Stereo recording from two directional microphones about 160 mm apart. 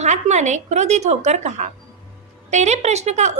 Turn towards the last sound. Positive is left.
turn(degrees=-45)  # may be behind; listen again after turning